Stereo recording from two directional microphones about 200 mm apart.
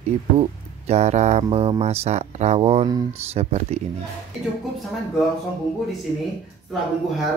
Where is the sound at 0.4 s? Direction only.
35° right (ahead or behind).